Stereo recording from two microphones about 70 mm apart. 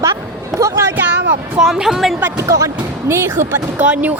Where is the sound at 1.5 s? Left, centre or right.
Centre.